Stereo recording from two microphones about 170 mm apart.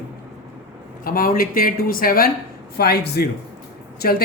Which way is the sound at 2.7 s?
70° left (ahead or behind).